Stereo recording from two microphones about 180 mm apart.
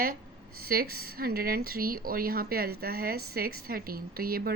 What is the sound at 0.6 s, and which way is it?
Speech, 55° right (ahead or behind).